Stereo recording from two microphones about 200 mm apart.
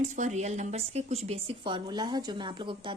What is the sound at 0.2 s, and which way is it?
A woman's voice, 35° right (ahead or behind).